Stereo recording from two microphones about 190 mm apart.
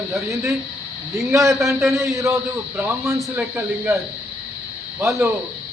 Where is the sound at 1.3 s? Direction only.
15° right (ahead or behind).